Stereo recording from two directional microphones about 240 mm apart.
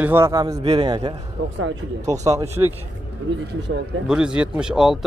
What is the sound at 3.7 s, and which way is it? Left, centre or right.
Speech, right.